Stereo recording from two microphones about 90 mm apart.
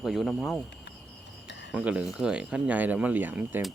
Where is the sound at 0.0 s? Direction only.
5° right (ahead or behind).